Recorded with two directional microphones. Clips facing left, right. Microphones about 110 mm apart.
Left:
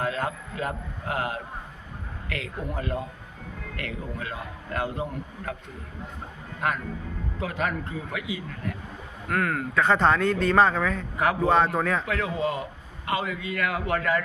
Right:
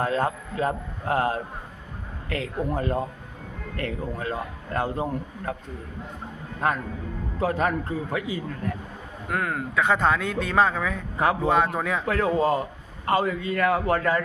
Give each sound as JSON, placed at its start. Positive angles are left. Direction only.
{"t": 0.0, "sound": "a man's voice", "side_deg": -35}
{"t": 6.6, "sound": "a man's voice", "side_deg": -35}
{"t": 9.3, "sound": "speech", "side_deg": -20}
{"t": 12.0, "sound": "a man's voice", "side_deg": -40}